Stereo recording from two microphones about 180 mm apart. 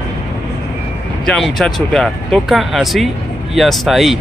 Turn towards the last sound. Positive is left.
turn(degrees=0)  # may be behind; listen again after turning